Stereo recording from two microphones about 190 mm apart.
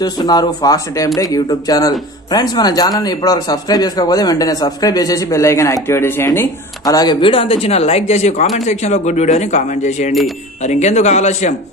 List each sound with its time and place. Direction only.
0.0 s speech: 20° left (ahead or behind); by 11.5 s 35° left (ahead or behind)